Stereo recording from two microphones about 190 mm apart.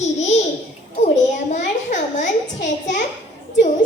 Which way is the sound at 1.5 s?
40° left (ahead or behind).